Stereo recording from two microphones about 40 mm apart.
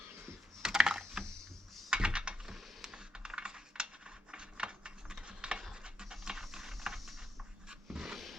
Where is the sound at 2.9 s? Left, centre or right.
Centre.